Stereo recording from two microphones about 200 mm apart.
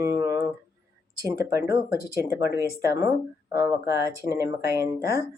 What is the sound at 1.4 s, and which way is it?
Speech, 15° right (ahead or behind).